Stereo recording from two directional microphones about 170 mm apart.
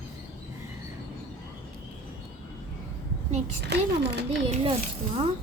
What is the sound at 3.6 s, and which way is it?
Speech, 80° right.